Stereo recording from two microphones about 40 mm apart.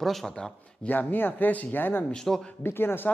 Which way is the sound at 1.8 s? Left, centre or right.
Left.